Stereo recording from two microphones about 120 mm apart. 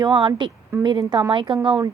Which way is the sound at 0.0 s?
40° right (ahead or behind).